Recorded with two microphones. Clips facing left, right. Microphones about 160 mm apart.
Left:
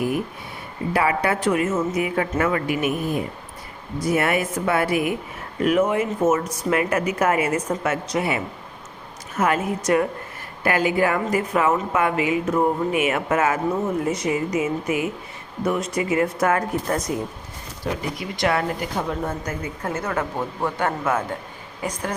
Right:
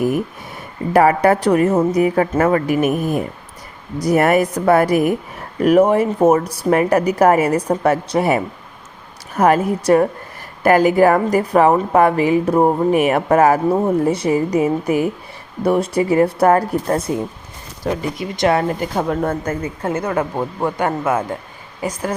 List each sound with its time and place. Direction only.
0.9 s speech: 45° right (ahead or behind)
3.9 s speech: 40° right (ahead or behind)
17.8 s speech: 45° right (ahead or behind)
18.2 s speech: 25° right (ahead or behind)
18.9 s speech: 55° right (ahead or behind)
20.1 s speech: 30° right (ahead or behind)
20.7 s speech: 15° right (ahead or behind)